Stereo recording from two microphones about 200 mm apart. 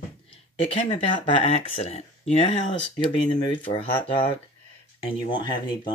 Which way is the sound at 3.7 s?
25° left (ahead or behind).